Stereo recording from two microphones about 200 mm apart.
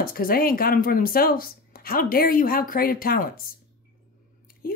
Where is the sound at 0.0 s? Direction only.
45° left (ahead or behind).